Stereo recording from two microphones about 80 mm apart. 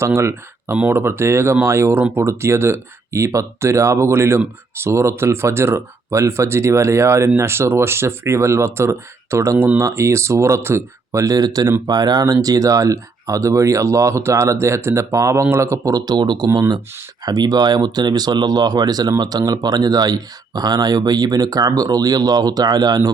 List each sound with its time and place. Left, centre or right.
0.0 s speech: right